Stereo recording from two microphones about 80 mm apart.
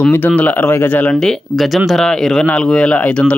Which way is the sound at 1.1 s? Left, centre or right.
Centre.